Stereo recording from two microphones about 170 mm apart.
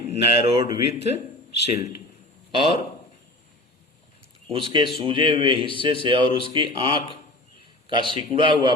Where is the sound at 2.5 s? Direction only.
30° right (ahead or behind).